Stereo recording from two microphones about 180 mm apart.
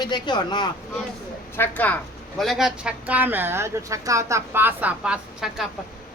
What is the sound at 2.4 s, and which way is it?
Speech, centre (ahead or behind).